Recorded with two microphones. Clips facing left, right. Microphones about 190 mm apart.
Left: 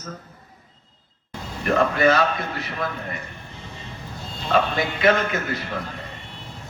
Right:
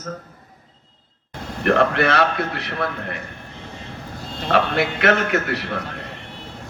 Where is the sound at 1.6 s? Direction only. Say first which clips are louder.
Right 1 dB; 70° right (ahead or behind).